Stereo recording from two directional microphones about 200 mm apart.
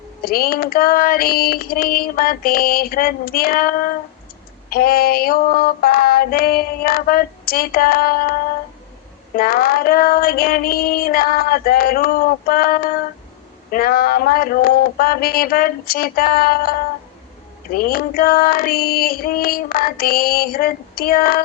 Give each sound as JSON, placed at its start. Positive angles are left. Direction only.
{"t": 0.2, "sound": "female singing", "side_deg": 50}
{"t": 17.7, "sound": "female singing", "side_deg": 50}